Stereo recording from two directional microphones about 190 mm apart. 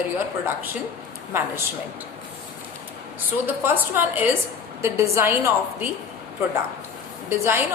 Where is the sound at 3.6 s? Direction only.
10° right (ahead or behind).